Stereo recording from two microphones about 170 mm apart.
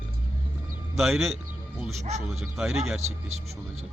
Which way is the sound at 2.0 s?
40° right (ahead or behind).